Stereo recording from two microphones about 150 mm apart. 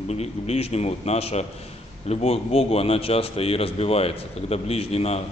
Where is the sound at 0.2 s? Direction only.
45° left (ahead or behind).